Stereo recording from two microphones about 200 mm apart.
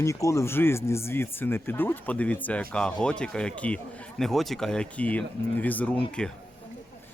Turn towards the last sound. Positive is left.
turn(degrees=5)  # may be behind; listen again after turning